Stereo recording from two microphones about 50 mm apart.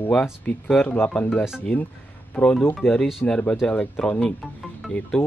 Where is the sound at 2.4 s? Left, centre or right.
Left.